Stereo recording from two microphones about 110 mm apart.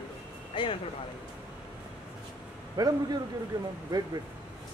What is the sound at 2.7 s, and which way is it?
Speech, 35° right (ahead or behind).